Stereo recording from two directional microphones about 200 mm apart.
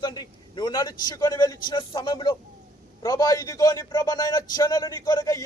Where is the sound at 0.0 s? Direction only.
20° left (ahead or behind).